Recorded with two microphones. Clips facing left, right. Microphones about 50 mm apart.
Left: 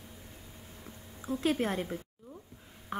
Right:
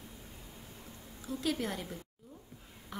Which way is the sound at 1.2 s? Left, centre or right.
Left.